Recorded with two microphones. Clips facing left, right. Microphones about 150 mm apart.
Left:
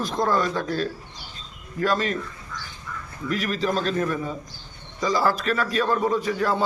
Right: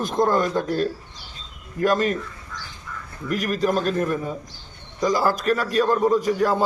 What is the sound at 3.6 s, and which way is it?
Speech, 10° right (ahead or behind).